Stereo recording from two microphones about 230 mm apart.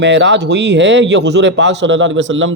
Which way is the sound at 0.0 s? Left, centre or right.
Right.